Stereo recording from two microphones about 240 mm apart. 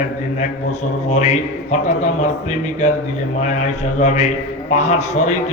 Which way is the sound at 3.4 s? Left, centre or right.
Left.